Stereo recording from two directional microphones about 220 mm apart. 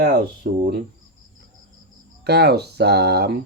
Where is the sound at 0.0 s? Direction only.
45° right (ahead or behind).